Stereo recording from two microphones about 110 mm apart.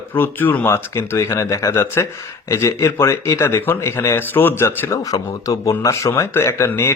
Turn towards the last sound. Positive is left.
turn(degrees=25)  # may be behind; listen again after turning